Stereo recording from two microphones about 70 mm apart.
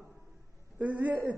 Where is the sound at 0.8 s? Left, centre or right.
Right.